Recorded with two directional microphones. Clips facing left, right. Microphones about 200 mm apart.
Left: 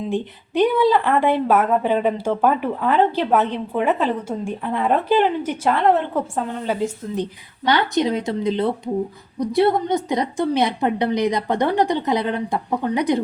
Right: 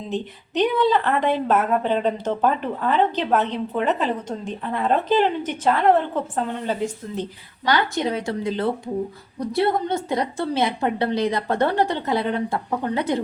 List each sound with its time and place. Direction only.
0.1 s a woman's voice: 10° left (ahead or behind)
7.6 s a woman's voice: 20° left (ahead or behind)